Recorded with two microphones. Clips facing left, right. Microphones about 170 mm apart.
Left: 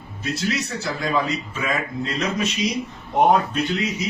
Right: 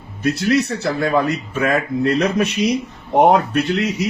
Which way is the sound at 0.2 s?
65° right (ahead or behind).